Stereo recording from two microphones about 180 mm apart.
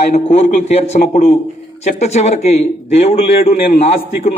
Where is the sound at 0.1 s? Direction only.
40° left (ahead or behind).